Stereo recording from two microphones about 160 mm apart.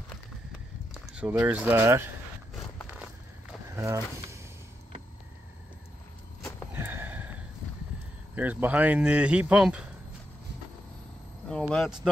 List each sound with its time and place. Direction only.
1.1 s speech: 10° right (ahead or behind)
3.7 s speech: 20° right (ahead or behind)
6.7 s a sound: 15° right (ahead or behind)
8.4 s speech: 10° right (ahead or behind)
11.7 s speech: centre (ahead or behind)